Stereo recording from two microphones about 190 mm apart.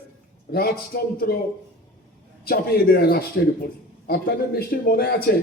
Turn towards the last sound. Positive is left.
turn(degrees=55)  # may be behind; listen again after turning